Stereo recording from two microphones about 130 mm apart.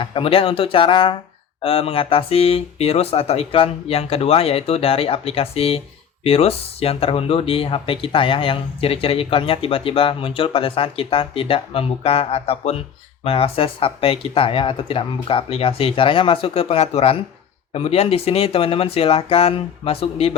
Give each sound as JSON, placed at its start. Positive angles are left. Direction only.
{"t": 0.0, "sound": "speech", "side_deg": 45}